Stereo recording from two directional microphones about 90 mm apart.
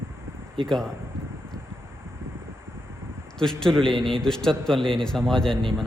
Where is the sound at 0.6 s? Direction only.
5° left (ahead or behind).